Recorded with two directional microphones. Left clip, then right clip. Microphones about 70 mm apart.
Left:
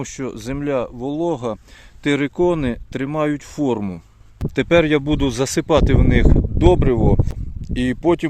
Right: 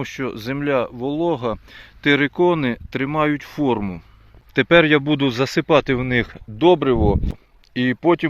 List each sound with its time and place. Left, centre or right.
0.0 s speech: centre
4.5 s speech: left